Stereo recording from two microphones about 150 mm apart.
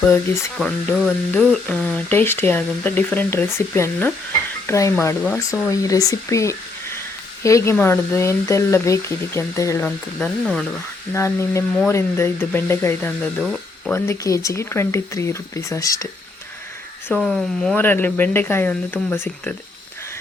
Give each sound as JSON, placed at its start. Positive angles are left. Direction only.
{"t": 0.5, "sound": "speech", "side_deg": 0}
{"t": 2.1, "sound": "speech", "side_deg": 15}
{"t": 9.8, "sound": "speech", "side_deg": 5}
{"t": 11.1, "sound": "speech", "side_deg": 20}
{"t": 13.4, "sound": "speech", "side_deg": -5}
{"t": 13.9, "sound": "speech", "side_deg": 20}
{"t": 17.1, "sound": "speech", "side_deg": 0}